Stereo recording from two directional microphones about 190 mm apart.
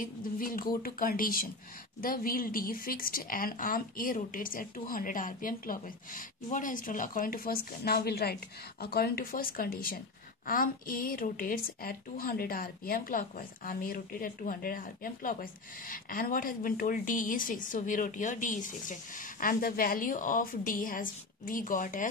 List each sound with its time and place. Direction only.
0.0 s a woman's voice: 50° left (ahead or behind)